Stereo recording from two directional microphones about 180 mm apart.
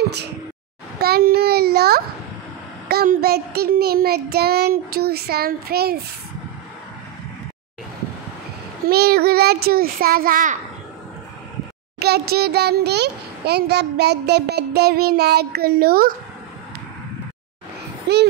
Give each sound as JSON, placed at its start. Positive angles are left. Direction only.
{"t": 1.0, "sound": "a child's voice", "side_deg": -60}
{"t": 8.8, "sound": "a child's voice", "side_deg": -60}
{"t": 12.0, "sound": "a child's voice", "side_deg": -60}
{"t": 18.1, "sound": "a child's voice", "side_deg": -65}